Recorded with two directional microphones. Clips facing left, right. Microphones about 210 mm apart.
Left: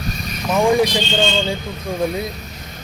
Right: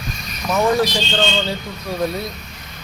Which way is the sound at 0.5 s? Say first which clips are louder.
Left 2 dB; 10° left (ahead or behind).